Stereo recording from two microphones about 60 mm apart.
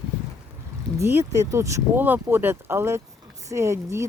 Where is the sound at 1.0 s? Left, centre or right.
Right.